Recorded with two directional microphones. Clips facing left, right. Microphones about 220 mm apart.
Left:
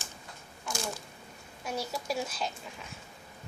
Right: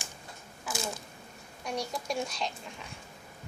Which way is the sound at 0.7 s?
5° right (ahead or behind).